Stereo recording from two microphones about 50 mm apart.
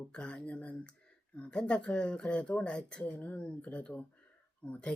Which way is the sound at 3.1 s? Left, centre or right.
Left.